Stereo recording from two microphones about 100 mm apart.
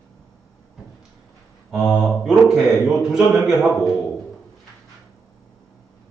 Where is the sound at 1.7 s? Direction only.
Centre (ahead or behind).